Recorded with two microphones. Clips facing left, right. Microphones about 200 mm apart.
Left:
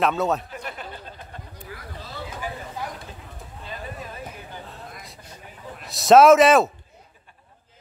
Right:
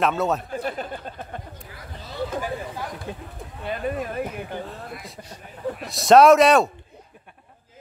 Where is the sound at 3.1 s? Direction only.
60° right (ahead or behind).